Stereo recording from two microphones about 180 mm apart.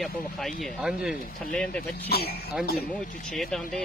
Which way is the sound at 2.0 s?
60° left (ahead or behind).